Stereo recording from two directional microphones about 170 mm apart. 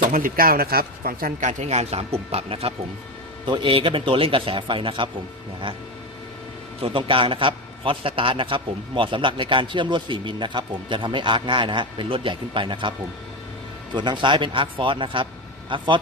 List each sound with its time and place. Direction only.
0.1 s a man's voice: 55° right (ahead or behind); by 5.0 s 30° right (ahead or behind)
6.8 s a man's voice: 30° right (ahead or behind)
13.9 s a man's voice: 25° right (ahead or behind)